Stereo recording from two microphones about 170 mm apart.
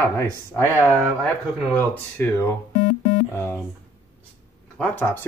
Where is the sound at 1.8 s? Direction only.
10° left (ahead or behind).